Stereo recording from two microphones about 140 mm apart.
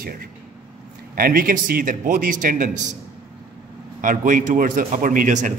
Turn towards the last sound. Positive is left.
turn(degrees=-65)  # may be behind; listen again after turning